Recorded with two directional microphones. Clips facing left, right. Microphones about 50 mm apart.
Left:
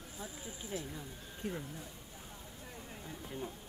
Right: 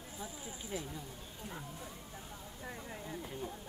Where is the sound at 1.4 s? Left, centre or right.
Left.